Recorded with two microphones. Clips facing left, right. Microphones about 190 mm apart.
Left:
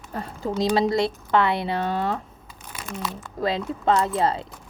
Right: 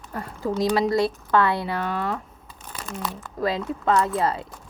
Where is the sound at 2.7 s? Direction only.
15° left (ahead or behind).